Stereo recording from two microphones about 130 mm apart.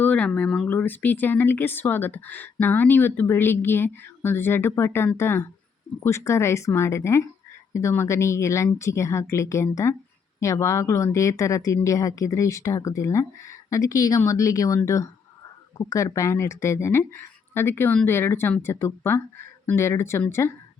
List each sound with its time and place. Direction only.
0.0 s speech: 10° left (ahead or behind)